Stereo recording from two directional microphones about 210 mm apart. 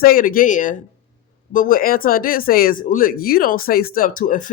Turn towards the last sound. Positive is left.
turn(degrees=40)  # may be behind; listen again after turning